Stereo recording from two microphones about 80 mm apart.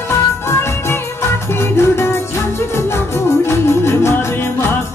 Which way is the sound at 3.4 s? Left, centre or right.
Left.